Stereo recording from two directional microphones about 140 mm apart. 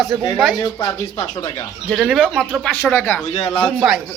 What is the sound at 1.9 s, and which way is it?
Speech, centre (ahead or behind).